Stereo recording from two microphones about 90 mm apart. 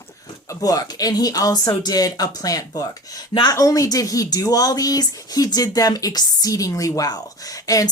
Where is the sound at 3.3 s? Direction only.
60° left (ahead or behind).